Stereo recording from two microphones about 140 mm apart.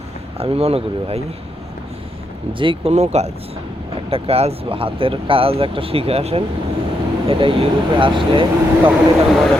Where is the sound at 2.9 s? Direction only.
55° right (ahead or behind); by 8.4 s 35° right (ahead or behind).